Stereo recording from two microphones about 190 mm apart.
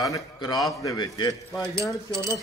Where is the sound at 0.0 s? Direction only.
20° left (ahead or behind).